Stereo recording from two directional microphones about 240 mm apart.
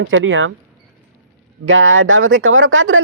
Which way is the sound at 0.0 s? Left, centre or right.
Right.